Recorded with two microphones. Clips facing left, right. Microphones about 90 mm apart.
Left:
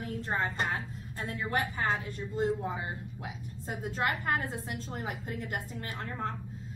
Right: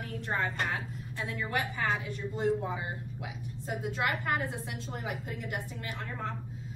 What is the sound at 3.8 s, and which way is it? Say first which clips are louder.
A woman's voice: left 1 dB; 40° left (ahead or behind).